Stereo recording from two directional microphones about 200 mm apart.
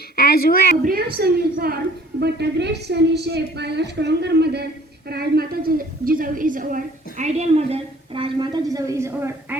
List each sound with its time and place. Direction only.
0.2 s a woman's voice: 50° left (ahead or behind)
0.9 s a woman's voice: 50° right (ahead or behind); by 9.6 s 15° right (ahead or behind)